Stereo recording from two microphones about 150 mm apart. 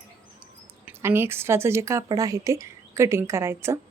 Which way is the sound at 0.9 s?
15° right (ahead or behind).